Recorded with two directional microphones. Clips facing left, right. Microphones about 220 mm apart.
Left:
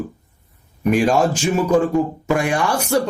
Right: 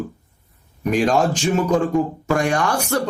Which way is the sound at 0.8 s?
5° left (ahead or behind).